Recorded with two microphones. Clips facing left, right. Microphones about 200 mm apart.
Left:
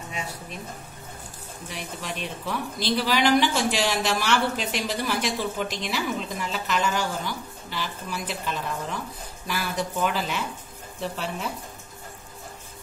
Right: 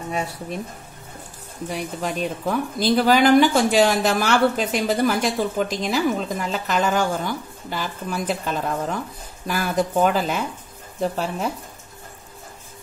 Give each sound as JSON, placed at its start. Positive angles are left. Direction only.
{"t": 1.7, "sound": "speech", "side_deg": -45}